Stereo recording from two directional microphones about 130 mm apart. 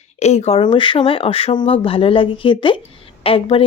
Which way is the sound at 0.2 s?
55° left (ahead or behind).